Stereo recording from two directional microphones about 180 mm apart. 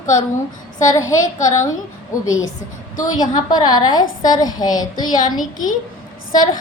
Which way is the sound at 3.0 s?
20° left (ahead or behind).